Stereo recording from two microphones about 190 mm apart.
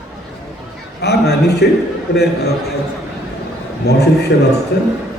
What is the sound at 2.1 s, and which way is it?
Speech, 60° left (ahead or behind).